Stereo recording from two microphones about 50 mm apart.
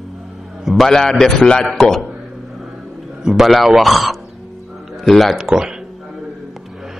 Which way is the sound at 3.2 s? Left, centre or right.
Centre.